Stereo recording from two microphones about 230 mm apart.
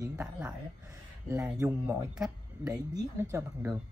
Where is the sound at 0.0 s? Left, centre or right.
Centre.